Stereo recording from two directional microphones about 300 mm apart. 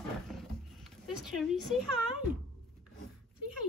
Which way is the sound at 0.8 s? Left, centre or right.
Centre.